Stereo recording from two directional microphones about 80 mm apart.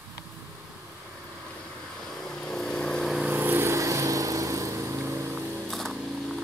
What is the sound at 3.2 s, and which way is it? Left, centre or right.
Vehicle, right.